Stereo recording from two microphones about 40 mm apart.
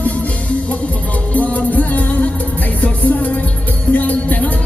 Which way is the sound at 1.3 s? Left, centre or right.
Left.